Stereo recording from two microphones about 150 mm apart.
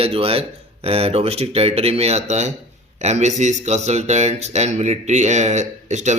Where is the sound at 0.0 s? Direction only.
40° right (ahead or behind).